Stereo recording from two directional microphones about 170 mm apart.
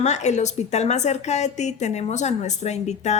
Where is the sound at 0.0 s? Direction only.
45° left (ahead or behind).